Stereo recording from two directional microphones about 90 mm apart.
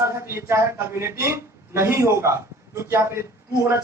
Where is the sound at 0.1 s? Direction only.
30° right (ahead or behind).